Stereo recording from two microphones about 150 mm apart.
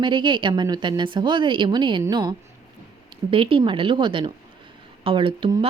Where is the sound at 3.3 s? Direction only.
35° right (ahead or behind).